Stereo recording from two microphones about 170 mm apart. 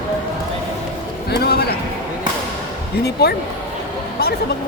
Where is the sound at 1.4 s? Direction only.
70° left (ahead or behind).